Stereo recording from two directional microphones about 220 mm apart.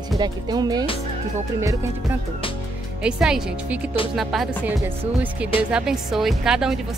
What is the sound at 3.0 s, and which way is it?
A woman's voice, 5° right (ahead or behind).